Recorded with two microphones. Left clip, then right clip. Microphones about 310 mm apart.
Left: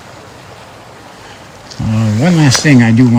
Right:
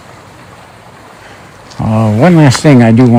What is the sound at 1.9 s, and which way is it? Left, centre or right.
Speech, centre.